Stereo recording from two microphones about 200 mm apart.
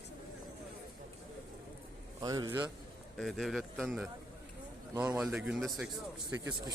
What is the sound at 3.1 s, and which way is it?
Speech, centre (ahead or behind).